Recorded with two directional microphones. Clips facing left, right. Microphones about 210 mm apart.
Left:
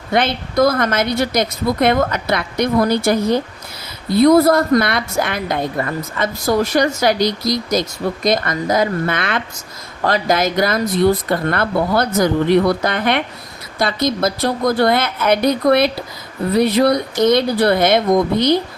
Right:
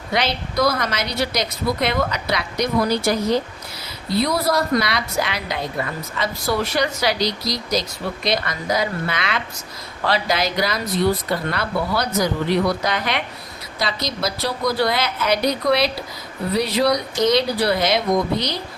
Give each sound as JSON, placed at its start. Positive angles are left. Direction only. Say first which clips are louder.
{"t": 0.1, "sound": "a woman's voice", "louder": "left 5 dB", "side_deg": 50}